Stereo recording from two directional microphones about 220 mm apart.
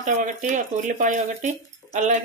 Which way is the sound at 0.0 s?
35° right (ahead or behind).